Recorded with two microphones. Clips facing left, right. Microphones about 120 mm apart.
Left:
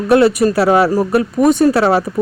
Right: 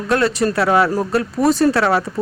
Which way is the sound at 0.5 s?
30° left (ahead or behind).